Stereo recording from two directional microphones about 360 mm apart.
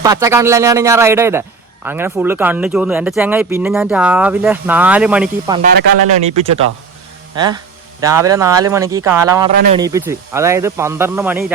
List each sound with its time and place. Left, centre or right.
0.0 s a man's voice: centre
6.3 s speech: centre